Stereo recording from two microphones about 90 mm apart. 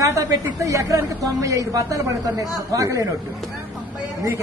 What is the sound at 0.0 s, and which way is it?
A woman's voice, 40° right (ahead or behind).